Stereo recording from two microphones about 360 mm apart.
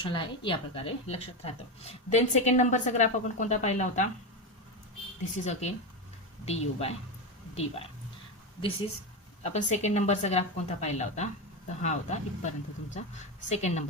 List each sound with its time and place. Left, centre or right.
0.0 s speech: centre
5.5 s a woman's voice: centre
9.4 s speech: centre